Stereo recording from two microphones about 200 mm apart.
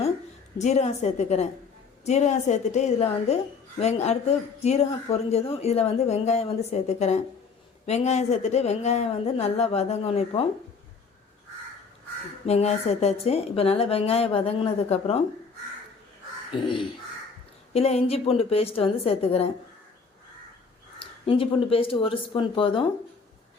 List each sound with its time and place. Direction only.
0.6 s speech: 35° left (ahead or behind)
12.5 s speech: 30° left (ahead or behind)
17.7 s speech: 30° left (ahead or behind)
21.0 s speech: 25° left (ahead or behind)